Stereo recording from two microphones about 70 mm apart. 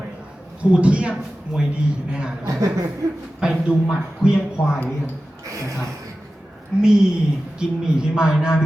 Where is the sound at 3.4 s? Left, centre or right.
Centre.